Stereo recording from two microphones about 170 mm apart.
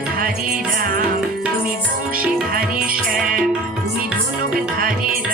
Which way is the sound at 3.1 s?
55° right (ahead or behind).